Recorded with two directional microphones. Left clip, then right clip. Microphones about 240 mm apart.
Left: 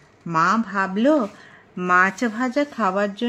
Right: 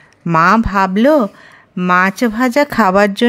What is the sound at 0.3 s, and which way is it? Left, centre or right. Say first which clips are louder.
Speech: right 9 dB; right.